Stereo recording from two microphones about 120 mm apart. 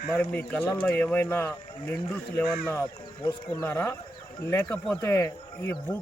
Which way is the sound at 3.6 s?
15° left (ahead or behind).